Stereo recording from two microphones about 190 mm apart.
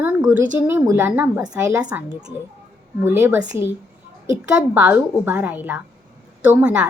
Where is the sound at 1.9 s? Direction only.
10° right (ahead or behind).